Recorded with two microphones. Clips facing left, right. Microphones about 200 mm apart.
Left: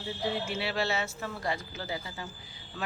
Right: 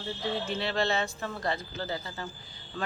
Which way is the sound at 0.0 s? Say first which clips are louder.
Even; 10° left (ahead or behind).